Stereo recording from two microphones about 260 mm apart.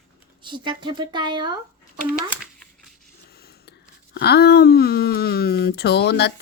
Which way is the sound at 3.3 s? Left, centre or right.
Left.